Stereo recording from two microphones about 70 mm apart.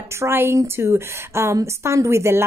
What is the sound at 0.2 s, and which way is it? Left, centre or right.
Speech, right.